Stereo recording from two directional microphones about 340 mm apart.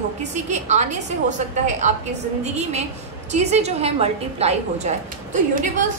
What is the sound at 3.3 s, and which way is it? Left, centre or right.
A woman's voice, centre.